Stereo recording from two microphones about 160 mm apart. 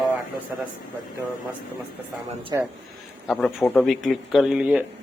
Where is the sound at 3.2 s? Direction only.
Centre (ahead or behind).